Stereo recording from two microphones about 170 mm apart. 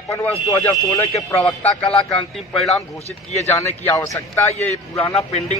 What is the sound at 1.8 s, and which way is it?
Speech, 35° left (ahead or behind).